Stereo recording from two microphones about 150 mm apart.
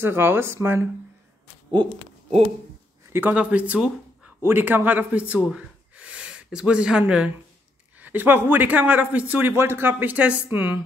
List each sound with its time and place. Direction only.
0.0 s a man's voice: 15° right (ahead or behind)
3.1 s a man's voice: 10° right (ahead or behind)